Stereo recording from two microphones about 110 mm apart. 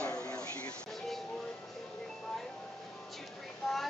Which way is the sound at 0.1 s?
35° left (ahead or behind).